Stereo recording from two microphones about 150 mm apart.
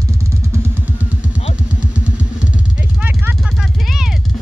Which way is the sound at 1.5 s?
10° right (ahead or behind).